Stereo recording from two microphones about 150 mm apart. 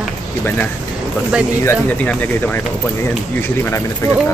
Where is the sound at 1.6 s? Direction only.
15° left (ahead or behind).